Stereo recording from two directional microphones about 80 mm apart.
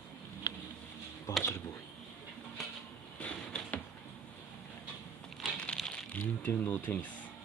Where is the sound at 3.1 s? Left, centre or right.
Centre.